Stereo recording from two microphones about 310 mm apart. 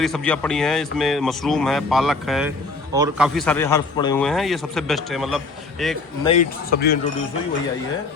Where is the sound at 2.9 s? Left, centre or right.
Centre.